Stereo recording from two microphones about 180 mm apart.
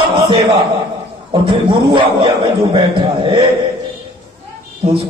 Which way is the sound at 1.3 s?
30° right (ahead or behind).